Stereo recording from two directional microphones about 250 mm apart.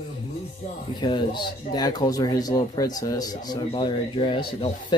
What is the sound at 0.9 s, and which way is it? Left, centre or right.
Speech, centre.